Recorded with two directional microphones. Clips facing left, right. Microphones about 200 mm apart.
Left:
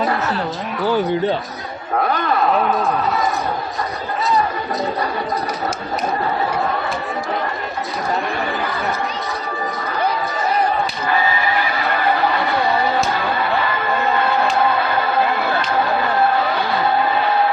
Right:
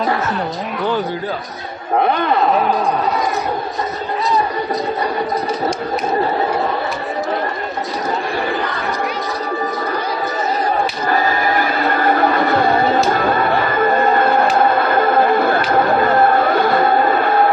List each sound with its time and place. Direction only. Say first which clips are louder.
11.1 s neigh: right 2 dB; 45° right (ahead or behind)